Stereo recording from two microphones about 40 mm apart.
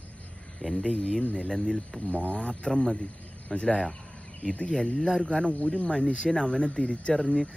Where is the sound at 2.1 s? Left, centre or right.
Left.